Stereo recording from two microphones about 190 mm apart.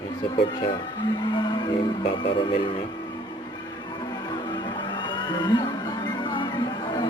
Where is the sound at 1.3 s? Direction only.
25° left (ahead or behind).